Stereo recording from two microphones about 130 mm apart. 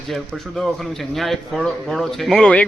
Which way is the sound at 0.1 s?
Centre (ahead or behind).